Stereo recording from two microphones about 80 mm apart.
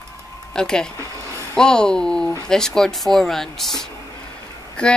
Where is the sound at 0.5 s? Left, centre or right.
Centre.